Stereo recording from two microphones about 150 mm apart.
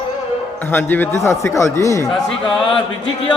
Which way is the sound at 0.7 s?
15° left (ahead or behind).